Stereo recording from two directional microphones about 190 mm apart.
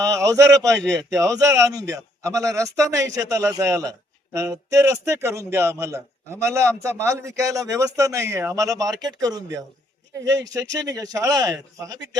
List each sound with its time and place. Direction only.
0.0 s a man's voice: 20° right (ahead or behind)